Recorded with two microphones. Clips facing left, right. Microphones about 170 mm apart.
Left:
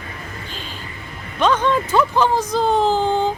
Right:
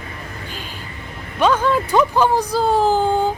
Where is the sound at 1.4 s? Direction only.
10° right (ahead or behind).